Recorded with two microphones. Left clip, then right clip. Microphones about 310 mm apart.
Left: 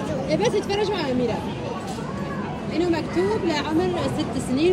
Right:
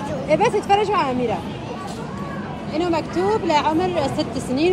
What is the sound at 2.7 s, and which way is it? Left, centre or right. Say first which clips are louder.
Speech: right 2 dB; centre.